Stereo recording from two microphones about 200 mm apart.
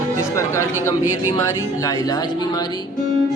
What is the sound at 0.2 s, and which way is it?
Music, 15° left (ahead or behind).